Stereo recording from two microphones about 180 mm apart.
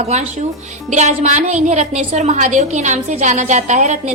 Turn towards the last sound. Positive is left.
turn(degrees=-40)  # may be behind; listen again after turning